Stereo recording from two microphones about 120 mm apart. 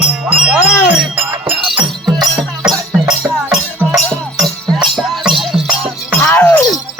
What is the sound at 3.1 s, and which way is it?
Music, 10° right (ahead or behind).